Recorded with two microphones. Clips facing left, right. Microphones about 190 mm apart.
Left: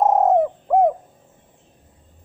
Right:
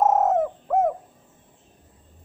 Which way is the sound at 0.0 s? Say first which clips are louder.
Left 4 dB; 15° left (ahead or behind).